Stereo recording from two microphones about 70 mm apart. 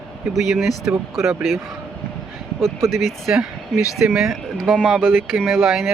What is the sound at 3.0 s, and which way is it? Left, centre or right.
Speech, centre.